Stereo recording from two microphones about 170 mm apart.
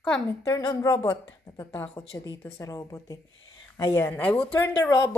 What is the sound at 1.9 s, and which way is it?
Speech, 30° left (ahead or behind).